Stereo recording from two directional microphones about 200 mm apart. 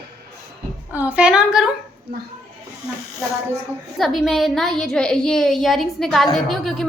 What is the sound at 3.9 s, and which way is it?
A woman's voice, centre (ahead or behind).